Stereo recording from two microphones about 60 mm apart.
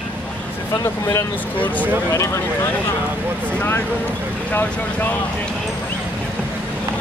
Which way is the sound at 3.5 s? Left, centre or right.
Left.